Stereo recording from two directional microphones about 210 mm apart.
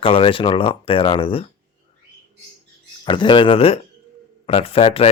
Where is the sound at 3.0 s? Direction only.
25° left (ahead or behind).